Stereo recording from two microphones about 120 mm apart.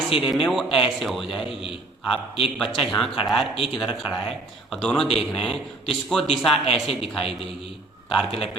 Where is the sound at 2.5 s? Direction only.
Centre (ahead or behind).